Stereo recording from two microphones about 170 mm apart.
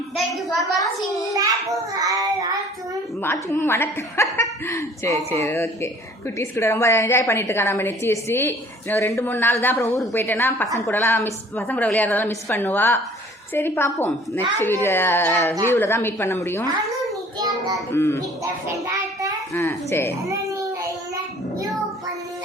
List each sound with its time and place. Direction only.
1.4 s child singing: 20° right (ahead or behind)
3.5 s a woman's voice: 15° left (ahead or behind)
17.3 s child singing: 25° right (ahead or behind)
17.9 s a woman's voice: 15° left (ahead or behind)
19.5 s a woman's voice: 15° left (ahead or behind)
20.2 s babbling: 20° right (ahead or behind)